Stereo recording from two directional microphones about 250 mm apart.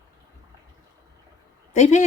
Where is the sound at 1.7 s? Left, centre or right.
Left.